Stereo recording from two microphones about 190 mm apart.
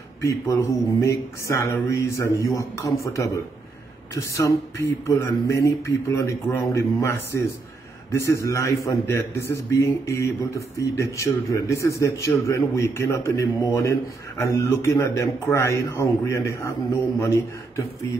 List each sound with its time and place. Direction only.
0.2 s a man's voice: 15° left (ahead or behind)